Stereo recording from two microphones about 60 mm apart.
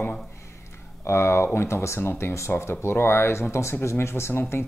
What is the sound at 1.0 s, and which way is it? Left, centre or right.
Speech, left.